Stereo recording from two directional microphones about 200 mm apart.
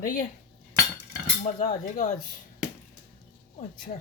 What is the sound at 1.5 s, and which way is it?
Speech, 40° left (ahead or behind).